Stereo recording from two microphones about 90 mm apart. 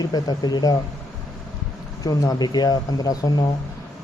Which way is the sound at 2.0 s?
40° left (ahead or behind).